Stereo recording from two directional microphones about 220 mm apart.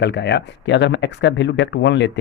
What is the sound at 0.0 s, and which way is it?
Speech, 50° left (ahead or behind).